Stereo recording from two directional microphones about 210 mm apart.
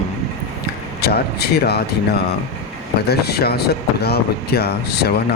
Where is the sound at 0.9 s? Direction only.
50° left (ahead or behind).